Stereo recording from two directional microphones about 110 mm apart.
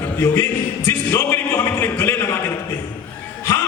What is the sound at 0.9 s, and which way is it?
Music, 25° left (ahead or behind).